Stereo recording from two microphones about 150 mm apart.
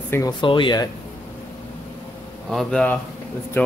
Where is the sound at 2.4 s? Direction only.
Centre (ahead or behind).